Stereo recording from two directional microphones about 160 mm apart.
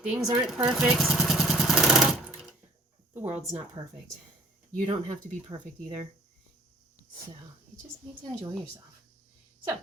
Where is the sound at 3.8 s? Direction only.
30° right (ahead or behind).